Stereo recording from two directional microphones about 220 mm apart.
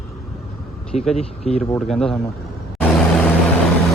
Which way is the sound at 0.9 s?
30° left (ahead or behind).